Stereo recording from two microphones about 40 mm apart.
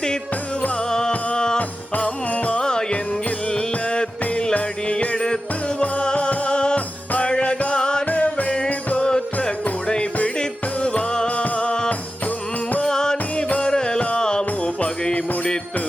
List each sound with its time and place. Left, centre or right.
0.9 s music: centre
1.5 s music: left
2.6 s music: centre
6.7 s music: left
8.0 s music: left
9.0 s music: left